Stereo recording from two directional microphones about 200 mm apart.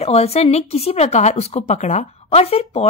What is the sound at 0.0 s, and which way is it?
Speech, 30° left (ahead or behind).